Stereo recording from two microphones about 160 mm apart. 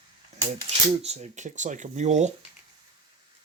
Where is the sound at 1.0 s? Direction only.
45° right (ahead or behind).